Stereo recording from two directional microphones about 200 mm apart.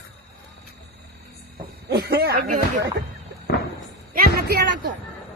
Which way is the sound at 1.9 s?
50° right (ahead or behind).